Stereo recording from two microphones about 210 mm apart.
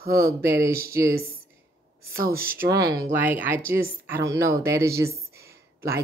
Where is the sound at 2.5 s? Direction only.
15° right (ahead or behind).